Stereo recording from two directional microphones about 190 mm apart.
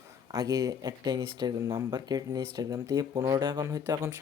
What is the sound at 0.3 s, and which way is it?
Speech, 20° right (ahead or behind).